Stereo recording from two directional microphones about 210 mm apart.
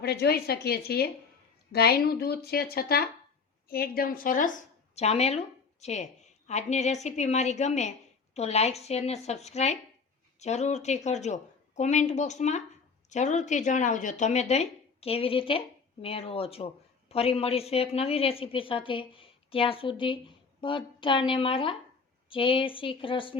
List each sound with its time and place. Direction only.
0.0 s a woman's voice: 50° left (ahead or behind); by 23.4 s 25° left (ahead or behind)